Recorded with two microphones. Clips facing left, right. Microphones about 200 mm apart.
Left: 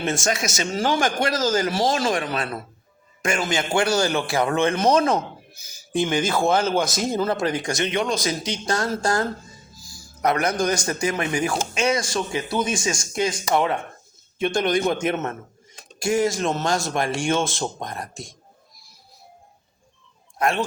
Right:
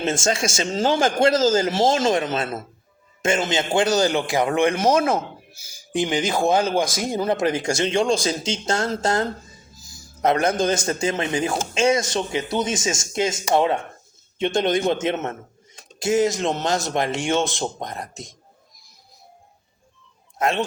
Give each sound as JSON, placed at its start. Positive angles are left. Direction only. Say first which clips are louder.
{"t": 0.0, "sound": "a man's voice", "louder": "right 2 dB", "side_deg": -25}
{"t": 20.4, "sound": "a man's voice", "louder": "even", "side_deg": -20}